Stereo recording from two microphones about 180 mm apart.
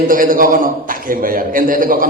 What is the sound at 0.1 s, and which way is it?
Speech, 50° right (ahead or behind).